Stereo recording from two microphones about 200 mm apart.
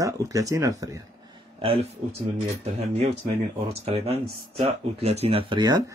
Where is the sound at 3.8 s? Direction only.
30° right (ahead or behind).